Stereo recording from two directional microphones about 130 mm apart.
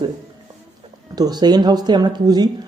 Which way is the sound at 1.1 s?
30° right (ahead or behind).